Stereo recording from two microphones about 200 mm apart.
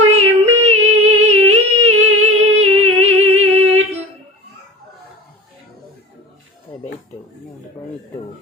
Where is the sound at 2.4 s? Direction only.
30° right (ahead or behind).